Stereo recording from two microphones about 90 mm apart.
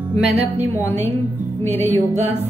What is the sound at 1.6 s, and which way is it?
Music, 30° left (ahead or behind).